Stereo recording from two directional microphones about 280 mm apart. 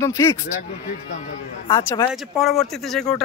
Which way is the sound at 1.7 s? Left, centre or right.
Centre.